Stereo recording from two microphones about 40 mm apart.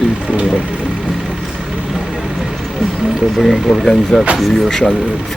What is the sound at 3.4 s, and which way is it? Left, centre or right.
Speech, centre.